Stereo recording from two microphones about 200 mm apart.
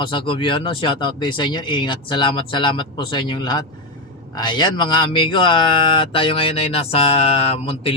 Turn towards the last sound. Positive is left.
turn(degrees=30)  # may be behind; listen again after turning